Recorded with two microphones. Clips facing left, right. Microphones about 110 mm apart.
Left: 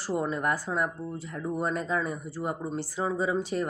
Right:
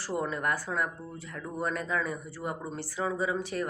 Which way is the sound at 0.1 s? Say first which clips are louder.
Left 3 dB; 25° left (ahead or behind).